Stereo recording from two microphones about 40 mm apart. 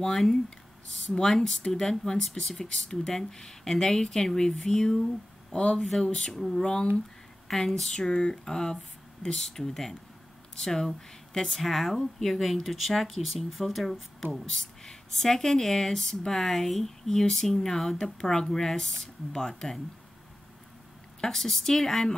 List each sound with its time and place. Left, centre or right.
0.0 s speech: centre
5.5 s speech: left
5.9 s speech: centre
8.1 s speech: left
10.9 s speech: centre
14.5 s speech: centre
21.2 s speech: centre